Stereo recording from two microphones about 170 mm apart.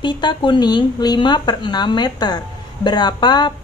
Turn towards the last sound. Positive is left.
turn(degrees=25)  # may be behind; listen again after turning